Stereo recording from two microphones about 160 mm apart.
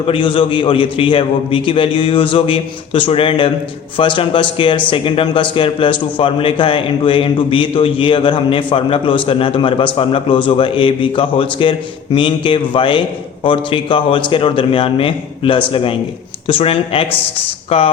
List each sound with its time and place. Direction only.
0.1 s a man's voice: 35° left (ahead or behind)